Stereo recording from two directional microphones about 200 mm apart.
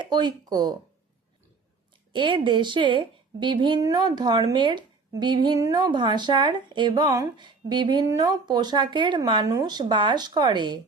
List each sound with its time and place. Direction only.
0.0 s speech: 20° right (ahead or behind)
2.1 s a woman's voice: 25° right (ahead or behind)